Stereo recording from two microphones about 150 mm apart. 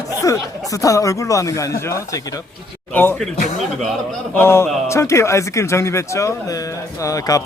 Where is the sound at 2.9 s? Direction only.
10° left (ahead or behind).